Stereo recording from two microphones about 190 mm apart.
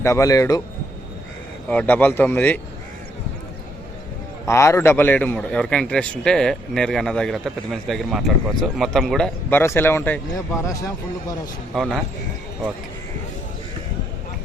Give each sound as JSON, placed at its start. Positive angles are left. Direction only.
{"t": 0.0, "sound": "speech", "side_deg": 15}
{"t": 1.6, "sound": "speech", "side_deg": 10}
{"t": 4.4, "sound": "a man's voice", "side_deg": 15}
{"t": 11.7, "sound": "a man's voice", "side_deg": 0}